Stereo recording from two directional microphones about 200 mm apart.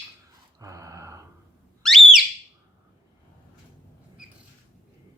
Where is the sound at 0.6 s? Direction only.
15° right (ahead or behind).